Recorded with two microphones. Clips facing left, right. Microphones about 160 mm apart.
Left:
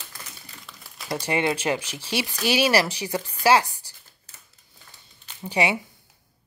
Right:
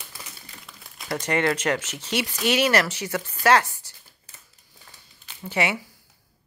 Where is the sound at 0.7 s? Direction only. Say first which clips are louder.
Left 1 dB; centre (ahead or behind).